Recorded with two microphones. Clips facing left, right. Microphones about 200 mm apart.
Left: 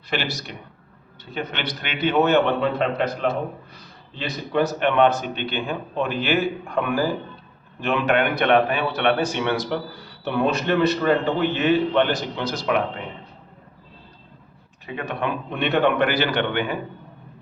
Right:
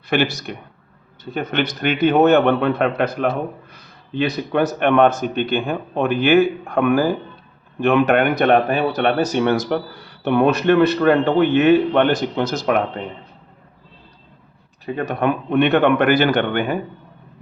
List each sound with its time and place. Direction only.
0.1 s a man's voice: 50° right (ahead or behind)
14.8 s a man's voice: 40° right (ahead or behind)